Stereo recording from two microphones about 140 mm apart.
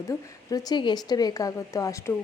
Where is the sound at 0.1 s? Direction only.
25° left (ahead or behind).